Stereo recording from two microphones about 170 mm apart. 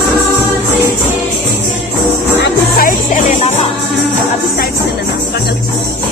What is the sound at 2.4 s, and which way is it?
Music, 55° left (ahead or behind).